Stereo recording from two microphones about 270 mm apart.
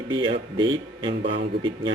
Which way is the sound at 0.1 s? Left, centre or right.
Centre.